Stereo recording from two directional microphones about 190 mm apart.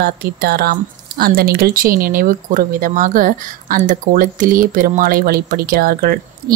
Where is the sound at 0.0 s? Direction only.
55° right (ahead or behind).